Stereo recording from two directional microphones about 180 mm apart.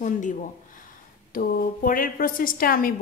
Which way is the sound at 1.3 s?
55° left (ahead or behind).